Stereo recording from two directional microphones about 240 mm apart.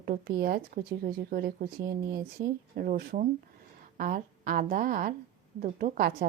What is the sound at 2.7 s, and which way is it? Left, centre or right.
Speech, right.